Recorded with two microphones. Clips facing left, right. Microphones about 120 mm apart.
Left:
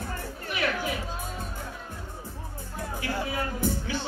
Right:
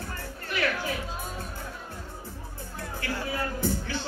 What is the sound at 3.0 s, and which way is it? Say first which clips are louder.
Music: left 1 dB; 15° left (ahead or behind).